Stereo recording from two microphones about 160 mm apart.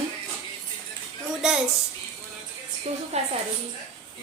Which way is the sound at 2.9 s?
45° right (ahead or behind).